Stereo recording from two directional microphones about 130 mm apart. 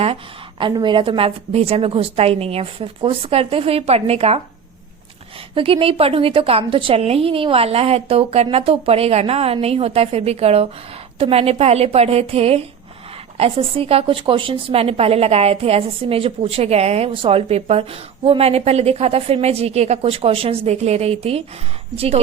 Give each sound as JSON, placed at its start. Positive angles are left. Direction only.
{"t": 0.6, "sound": "a woman's voice", "side_deg": -35}
{"t": 5.5, "sound": "a woman's voice", "side_deg": -45}